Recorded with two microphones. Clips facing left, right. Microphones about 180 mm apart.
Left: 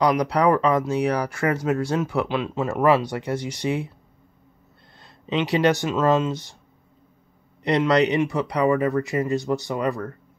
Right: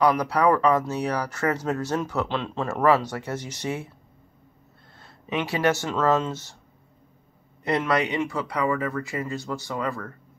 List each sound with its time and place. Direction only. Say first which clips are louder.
0.0 s speech: left 1 dB; 15° left (ahead or behind)
4.9 s speech: left 4 dB; 20° left (ahead or behind)
7.6 s speech: left 5 dB; 20° left (ahead or behind)